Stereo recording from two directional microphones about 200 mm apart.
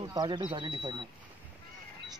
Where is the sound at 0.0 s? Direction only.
20° right (ahead or behind).